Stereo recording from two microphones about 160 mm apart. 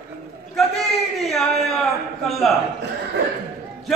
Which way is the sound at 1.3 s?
Centre (ahead or behind).